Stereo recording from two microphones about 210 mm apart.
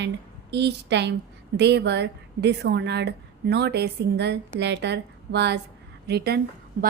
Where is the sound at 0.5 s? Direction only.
55° right (ahead or behind).